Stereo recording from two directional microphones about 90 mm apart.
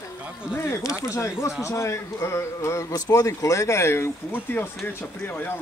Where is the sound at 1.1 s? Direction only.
30° left (ahead or behind).